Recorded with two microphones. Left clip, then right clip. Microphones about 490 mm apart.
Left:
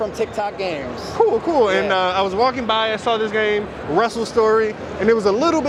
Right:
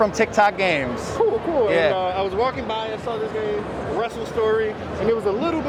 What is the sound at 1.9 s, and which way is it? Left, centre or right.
Speech, left.